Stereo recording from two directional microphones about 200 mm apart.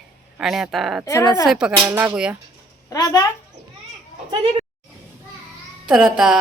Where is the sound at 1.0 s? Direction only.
15° left (ahead or behind).